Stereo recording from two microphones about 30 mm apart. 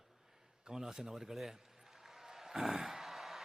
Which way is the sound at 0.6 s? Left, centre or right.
Centre.